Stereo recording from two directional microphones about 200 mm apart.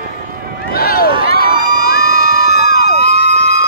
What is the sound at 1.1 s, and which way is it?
Run, 25° right (ahead or behind).